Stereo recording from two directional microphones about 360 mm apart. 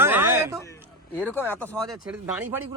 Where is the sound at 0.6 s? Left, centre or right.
Centre.